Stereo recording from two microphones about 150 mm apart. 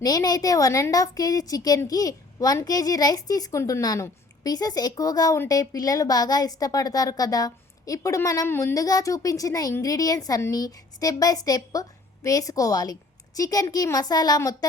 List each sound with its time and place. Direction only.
0.0 s a woman's voice: 25° left (ahead or behind)